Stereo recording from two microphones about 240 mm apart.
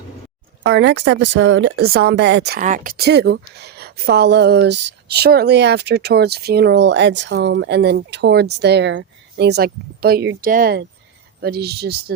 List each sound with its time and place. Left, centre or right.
0.6 s speech: right